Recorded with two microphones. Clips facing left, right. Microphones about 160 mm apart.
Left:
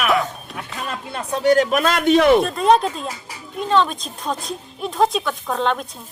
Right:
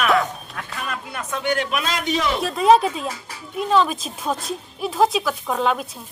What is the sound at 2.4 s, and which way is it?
A woman's voice, centre (ahead or behind).